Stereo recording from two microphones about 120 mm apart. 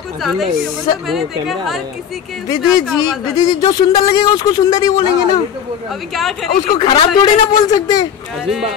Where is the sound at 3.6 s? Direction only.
40° left (ahead or behind).